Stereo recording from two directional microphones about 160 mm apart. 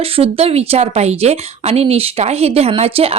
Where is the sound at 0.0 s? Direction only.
35° right (ahead or behind).